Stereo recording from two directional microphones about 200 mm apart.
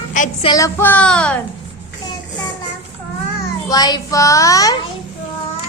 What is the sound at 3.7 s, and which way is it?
Child singing, 20° left (ahead or behind).